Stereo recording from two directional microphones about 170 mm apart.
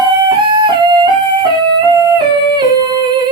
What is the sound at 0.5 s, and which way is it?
Music, 25° right (ahead or behind).